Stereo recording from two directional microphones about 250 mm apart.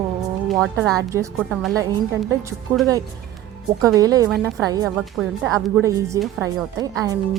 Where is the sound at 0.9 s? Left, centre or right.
Centre.